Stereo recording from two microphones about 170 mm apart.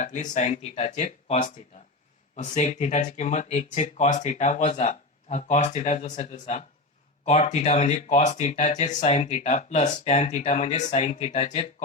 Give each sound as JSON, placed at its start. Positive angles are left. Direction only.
{"t": 0.0, "sound": "speech", "side_deg": 45}